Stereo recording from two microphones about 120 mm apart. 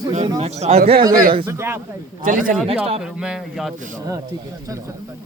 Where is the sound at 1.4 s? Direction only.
20° right (ahead or behind).